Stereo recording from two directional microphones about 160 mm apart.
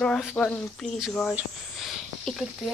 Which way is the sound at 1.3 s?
Centre (ahead or behind).